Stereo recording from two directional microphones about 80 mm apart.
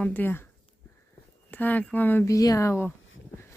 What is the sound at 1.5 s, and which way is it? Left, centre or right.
Speech, left.